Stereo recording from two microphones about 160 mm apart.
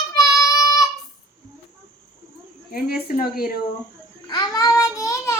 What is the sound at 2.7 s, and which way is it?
Speech, 65° left (ahead or behind).